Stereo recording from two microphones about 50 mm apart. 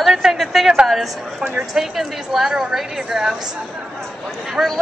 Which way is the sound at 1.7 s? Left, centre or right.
Centre.